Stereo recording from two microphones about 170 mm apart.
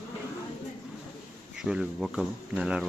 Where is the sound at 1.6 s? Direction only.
Centre (ahead or behind).